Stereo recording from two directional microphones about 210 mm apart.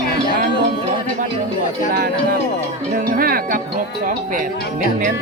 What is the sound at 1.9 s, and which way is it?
A man's voice, 45° right (ahead or behind).